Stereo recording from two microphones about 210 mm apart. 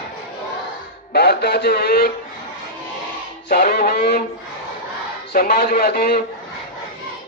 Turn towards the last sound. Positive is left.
turn(degrees=45)  # may be behind; listen again after turning